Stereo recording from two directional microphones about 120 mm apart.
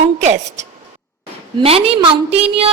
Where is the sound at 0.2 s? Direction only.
70° right (ahead or behind).